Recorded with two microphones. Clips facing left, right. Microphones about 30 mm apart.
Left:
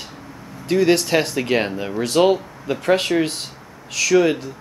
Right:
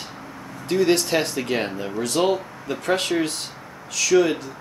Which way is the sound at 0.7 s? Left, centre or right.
Centre.